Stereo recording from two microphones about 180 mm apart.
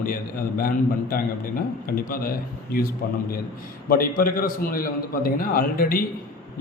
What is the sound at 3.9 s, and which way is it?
A man's voice, 55° left (ahead or behind).